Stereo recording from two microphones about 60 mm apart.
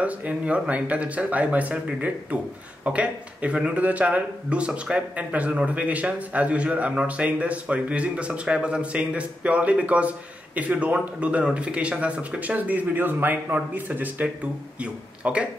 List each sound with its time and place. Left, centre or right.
0.0 s speech: right